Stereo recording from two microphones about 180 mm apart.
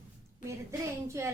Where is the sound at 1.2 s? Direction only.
15° right (ahead or behind).